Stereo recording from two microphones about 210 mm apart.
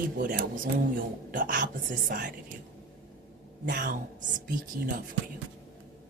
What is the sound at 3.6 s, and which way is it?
Speech, 40° right (ahead or behind).